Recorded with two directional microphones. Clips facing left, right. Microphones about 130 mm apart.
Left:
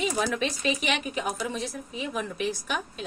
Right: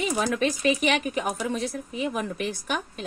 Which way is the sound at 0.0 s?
45° right (ahead or behind).